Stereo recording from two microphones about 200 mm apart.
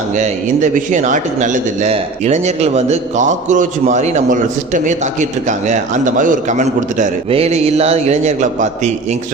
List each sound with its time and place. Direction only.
0.2 s a man's voice: 40° right (ahead or behind)